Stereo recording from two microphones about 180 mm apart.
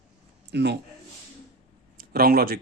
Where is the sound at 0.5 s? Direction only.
70° right (ahead or behind).